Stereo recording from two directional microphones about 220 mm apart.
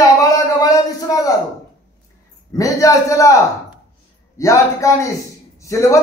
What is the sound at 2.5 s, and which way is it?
Speech, 15° left (ahead or behind).